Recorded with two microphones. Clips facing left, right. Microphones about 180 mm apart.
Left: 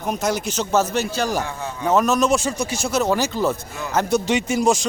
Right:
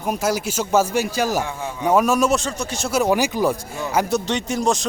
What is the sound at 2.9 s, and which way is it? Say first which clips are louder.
Speech: right 2 dB; 15° right (ahead or behind).